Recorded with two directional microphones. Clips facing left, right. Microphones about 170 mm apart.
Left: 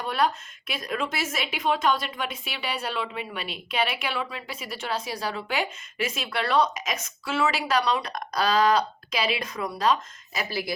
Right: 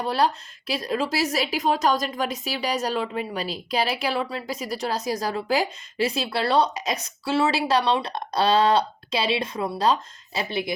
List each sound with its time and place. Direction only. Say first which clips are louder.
0.0 s a woman's voice: right 3 dB; 35° right (ahead or behind)